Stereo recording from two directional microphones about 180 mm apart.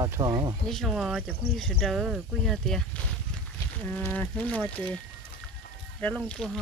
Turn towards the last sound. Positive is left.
turn(degrees=5)  # may be behind; listen again after turning